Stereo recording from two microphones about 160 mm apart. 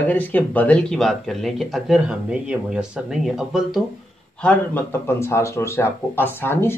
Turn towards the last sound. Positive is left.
turn(degrees=15)  # may be behind; listen again after turning